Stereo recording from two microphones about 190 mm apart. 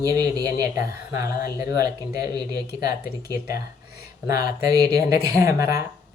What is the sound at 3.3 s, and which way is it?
Speech, 55° left (ahead or behind).